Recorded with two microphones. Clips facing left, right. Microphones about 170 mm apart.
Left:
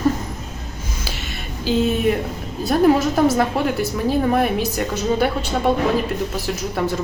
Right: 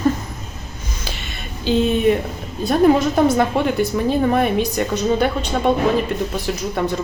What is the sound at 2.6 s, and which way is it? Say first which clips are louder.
A woman's voice: right 1 dB; 5° left (ahead or behind).